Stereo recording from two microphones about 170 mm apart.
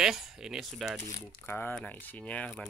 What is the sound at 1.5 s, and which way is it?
Speech, 10° left (ahead or behind).